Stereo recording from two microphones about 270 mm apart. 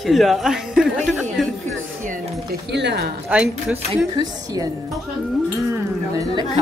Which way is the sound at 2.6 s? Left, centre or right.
Right.